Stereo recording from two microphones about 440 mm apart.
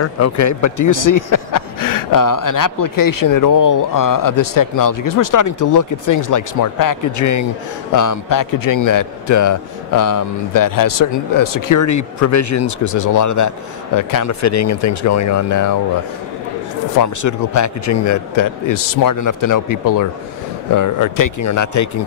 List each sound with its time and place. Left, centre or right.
0.0 s a man's voice: left
17.0 s a man's voice: left